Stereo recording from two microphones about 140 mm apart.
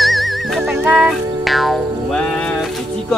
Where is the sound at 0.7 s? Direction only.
10° right (ahead or behind).